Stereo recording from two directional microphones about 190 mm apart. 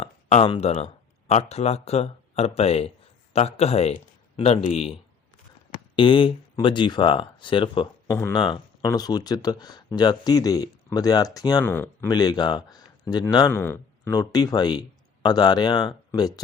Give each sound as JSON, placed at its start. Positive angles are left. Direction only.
{"t": 0.0, "sound": "speech", "side_deg": 35}
{"t": 6.0, "sound": "speech", "side_deg": 25}
{"t": 8.0, "sound": "speech", "side_deg": 15}
{"t": 12.0, "sound": "speech", "side_deg": 20}